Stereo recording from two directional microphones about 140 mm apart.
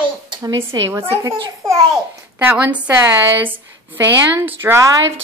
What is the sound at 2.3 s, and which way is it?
A woman's voice, 10° right (ahead or behind).